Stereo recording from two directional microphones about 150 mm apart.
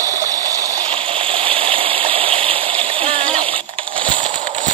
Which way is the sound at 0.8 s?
35° right (ahead or behind).